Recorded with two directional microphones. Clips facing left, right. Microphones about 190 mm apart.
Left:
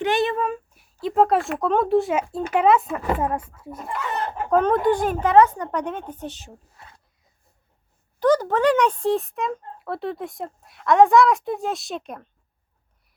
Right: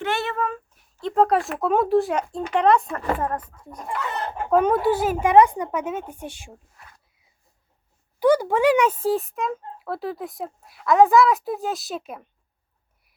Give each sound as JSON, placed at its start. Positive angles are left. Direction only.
{"t": 0.0, "sound": "speech", "side_deg": 15}
{"t": 4.4, "sound": "a woman's voice", "side_deg": -5}
{"t": 6.7, "sound": "a sound", "side_deg": 25}
{"t": 8.2, "sound": "speech", "side_deg": -10}